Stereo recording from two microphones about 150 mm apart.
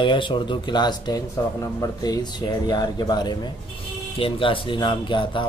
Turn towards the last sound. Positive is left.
turn(degrees=35)  # may be behind; listen again after turning